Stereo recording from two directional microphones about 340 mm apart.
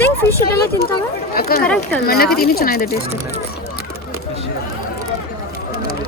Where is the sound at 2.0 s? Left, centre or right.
Left.